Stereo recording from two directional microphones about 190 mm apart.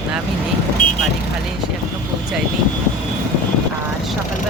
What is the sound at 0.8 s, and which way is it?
Vehicle, 40° left (ahead or behind).